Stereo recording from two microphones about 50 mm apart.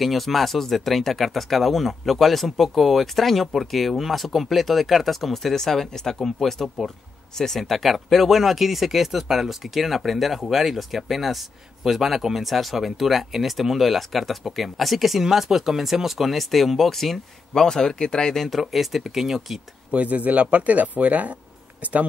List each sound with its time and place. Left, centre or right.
0.0 s speech: centre
19.9 s speech: right